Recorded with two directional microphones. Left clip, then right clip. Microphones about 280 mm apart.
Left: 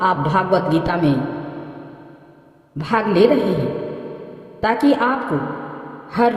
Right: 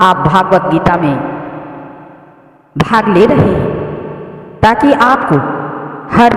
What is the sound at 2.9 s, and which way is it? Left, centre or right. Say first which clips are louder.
Speech: right 7 dB; right.